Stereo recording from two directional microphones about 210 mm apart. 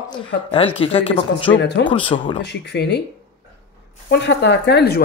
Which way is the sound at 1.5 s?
60° left (ahead or behind).